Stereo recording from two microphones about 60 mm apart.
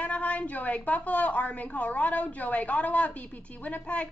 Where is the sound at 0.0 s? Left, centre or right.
Left.